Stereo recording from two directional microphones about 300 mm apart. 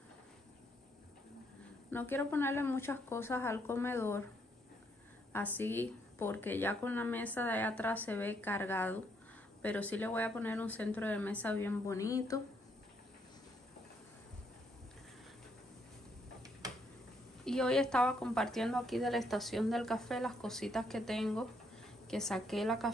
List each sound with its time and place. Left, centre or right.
1.9 s speech: centre
5.3 s speech: centre
17.5 s speech: centre